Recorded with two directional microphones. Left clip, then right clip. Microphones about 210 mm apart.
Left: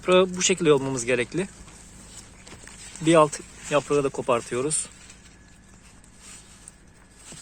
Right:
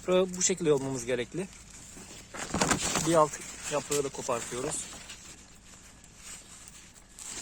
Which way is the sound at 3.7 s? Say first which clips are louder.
Left 9 dB; 20° left (ahead or behind).